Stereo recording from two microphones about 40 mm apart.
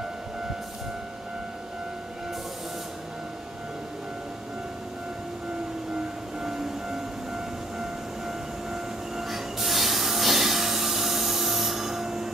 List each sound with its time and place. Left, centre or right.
6.4 s train: centre